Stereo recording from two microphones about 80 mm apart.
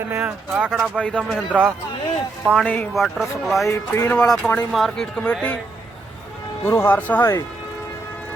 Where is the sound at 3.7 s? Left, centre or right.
Left.